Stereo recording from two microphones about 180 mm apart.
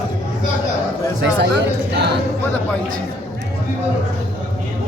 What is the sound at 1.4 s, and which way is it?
Speech, 70° right (ahead or behind).